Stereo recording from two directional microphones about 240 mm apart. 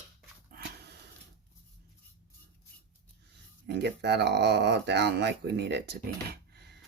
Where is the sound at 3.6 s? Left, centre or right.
Right.